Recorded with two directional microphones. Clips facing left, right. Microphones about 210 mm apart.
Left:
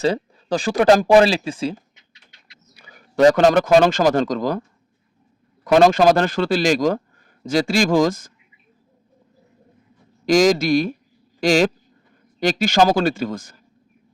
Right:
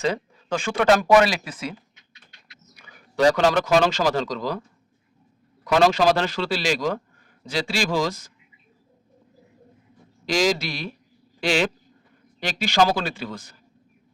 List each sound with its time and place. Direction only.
0.0 s speech: 35° left (ahead or behind)
2.7 s a sound: 35° left (ahead or behind)
3.3 s a man's voice: 50° left (ahead or behind)
5.6 s a man's voice: 50° left (ahead or behind)
10.2 s a man's voice: 45° left (ahead or behind)